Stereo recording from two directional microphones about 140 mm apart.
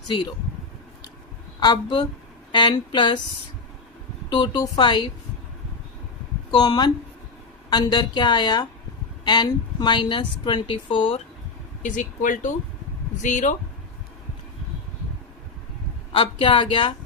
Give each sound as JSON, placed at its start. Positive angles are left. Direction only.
{"t": 1.5, "sound": "a woman's voice", "side_deg": 30}
{"t": 4.3, "sound": "a woman's voice", "side_deg": 30}
{"t": 6.5, "sound": "a woman's voice", "side_deg": 30}
{"t": 11.8, "sound": "speech", "side_deg": 65}
{"t": 16.1, "sound": "a woman's voice", "side_deg": 40}